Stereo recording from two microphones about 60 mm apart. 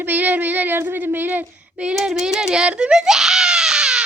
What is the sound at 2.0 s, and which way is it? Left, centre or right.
Baby cry, centre.